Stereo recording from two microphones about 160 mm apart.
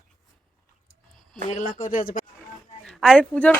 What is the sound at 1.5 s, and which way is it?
Speech, 55° left (ahead or behind).